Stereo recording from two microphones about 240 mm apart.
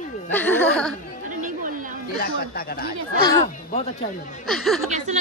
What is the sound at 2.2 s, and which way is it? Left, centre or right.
Speech, left.